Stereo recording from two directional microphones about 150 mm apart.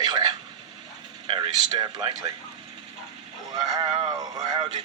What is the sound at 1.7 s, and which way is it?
Speech, 30° right (ahead or behind).